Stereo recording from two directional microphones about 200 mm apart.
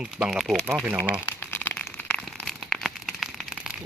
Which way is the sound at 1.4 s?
10° left (ahead or behind).